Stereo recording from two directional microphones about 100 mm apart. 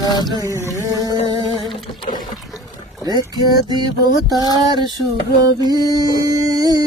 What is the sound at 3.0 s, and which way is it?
Music, 45° right (ahead or behind).